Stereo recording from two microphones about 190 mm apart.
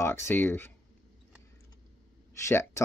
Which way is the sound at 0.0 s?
15° left (ahead or behind).